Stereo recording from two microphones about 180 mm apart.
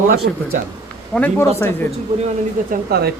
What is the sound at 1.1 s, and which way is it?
Speech, 10° left (ahead or behind).